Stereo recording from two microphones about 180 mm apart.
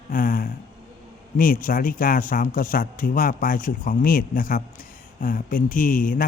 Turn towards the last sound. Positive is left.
turn(degrees=50)  # may be behind; listen again after turning